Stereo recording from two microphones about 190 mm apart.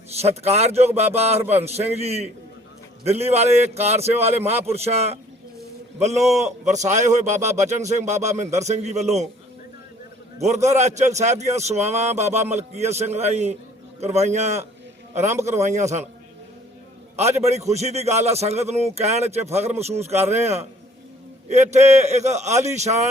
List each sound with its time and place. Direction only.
0.2 s a man's voice: 35° right (ahead or behind)
6.1 s a man's voice: centre (ahead or behind)
6.4 s a man's voice: 40° right (ahead or behind)
10.4 s a man's voice: 35° right (ahead or behind)
17.3 s a man's voice: 35° right (ahead or behind)